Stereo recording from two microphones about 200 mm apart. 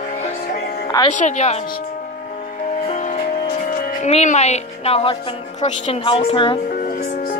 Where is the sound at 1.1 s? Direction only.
35° left (ahead or behind).